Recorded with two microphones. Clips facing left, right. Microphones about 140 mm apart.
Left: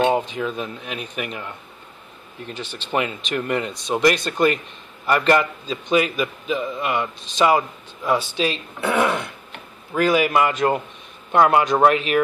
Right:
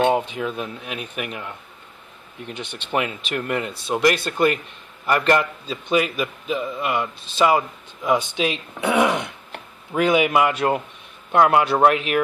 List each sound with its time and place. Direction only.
0.3 s a man's voice: 5° right (ahead or behind)
2.5 s speech: 65° right (ahead or behind)
2.9 s a man's voice: 5° right (ahead or behind)